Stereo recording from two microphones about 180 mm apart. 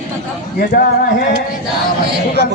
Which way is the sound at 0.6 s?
55° left (ahead or behind).